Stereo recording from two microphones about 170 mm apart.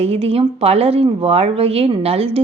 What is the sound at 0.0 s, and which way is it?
Speech, 35° right (ahead or behind).